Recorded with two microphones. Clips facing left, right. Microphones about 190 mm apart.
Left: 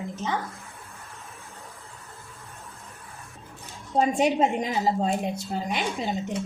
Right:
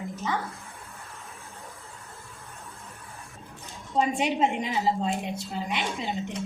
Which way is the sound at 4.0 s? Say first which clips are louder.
Left 3 dB; 40° left (ahead or behind).